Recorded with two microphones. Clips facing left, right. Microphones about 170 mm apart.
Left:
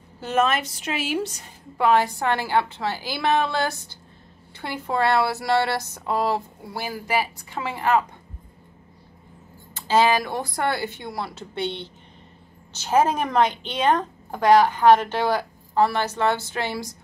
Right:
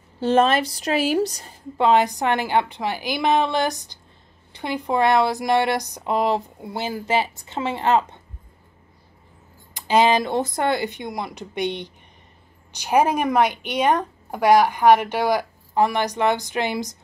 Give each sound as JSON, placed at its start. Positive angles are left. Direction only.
{"t": 0.2, "sound": "a woman's voice", "side_deg": -30}
{"t": 1.8, "sound": "speech", "side_deg": -20}
{"t": 9.8, "sound": "speech", "side_deg": -15}